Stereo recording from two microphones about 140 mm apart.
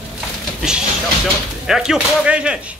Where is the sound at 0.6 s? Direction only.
5° right (ahead or behind).